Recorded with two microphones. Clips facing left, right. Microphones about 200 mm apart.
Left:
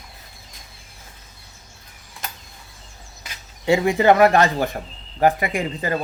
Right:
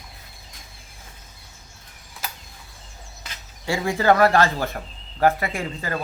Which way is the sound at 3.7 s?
20° left (ahead or behind).